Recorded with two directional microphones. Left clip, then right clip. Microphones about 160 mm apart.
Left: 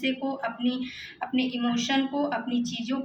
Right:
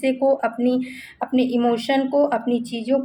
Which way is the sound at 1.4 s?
50° right (ahead or behind).